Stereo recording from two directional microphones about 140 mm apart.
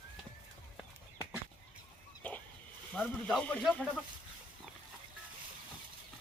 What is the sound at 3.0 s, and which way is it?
Speech, 5° left (ahead or behind).